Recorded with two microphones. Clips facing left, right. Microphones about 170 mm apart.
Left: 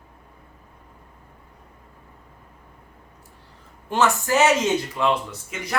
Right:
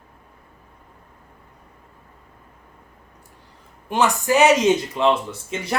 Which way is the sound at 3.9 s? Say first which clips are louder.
Right 1 dB; 15° right (ahead or behind).